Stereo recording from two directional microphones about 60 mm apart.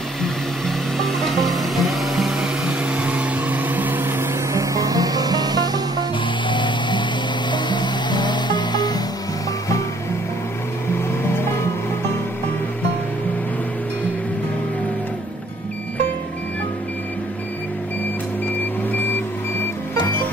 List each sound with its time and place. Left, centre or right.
0.2 s music: centre; by 4.3 s right
4.6 s music: right
20.0 s music: left